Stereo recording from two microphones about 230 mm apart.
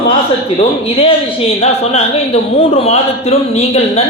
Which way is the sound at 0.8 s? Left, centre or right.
Left.